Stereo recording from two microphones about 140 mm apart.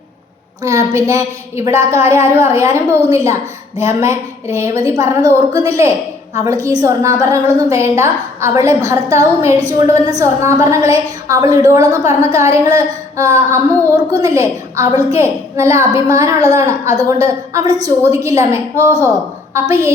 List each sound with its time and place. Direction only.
0.6 s a woman's voice: 25° right (ahead or behind)